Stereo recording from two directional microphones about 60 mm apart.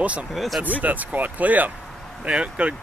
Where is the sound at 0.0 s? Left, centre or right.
Right.